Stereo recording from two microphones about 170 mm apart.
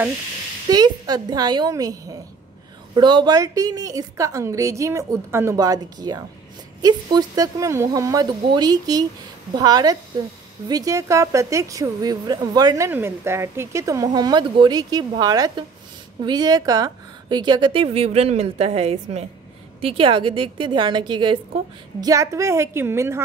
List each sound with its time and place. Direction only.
0.7 s a woman's voice: 25° right (ahead or behind)